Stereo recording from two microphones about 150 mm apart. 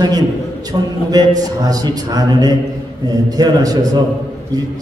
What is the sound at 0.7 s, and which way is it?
A man's voice, 30° right (ahead or behind).